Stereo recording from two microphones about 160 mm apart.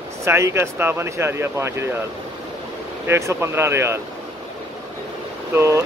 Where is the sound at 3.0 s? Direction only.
15° right (ahead or behind).